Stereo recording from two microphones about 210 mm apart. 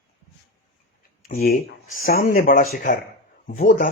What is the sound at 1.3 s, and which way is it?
Speech, 45° left (ahead or behind).